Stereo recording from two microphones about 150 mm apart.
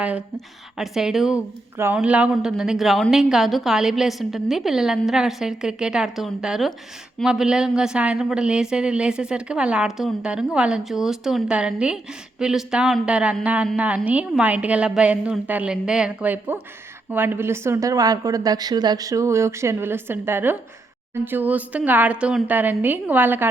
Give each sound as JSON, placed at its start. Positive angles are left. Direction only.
{"t": 0.3, "sound": "a woman's voice", "side_deg": 0}